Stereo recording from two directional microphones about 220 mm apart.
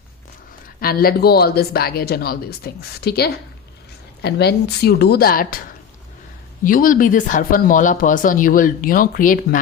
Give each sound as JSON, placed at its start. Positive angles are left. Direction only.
{"t": 0.8, "sound": "speech", "side_deg": 40}
{"t": 6.7, "sound": "speech", "side_deg": 40}